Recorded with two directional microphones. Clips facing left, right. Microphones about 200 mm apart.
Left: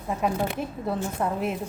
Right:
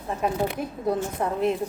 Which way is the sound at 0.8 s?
5° left (ahead or behind).